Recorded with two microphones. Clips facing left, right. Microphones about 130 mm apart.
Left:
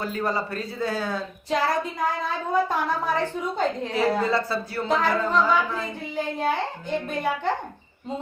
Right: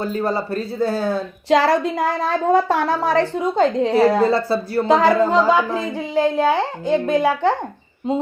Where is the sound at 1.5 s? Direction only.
90° right.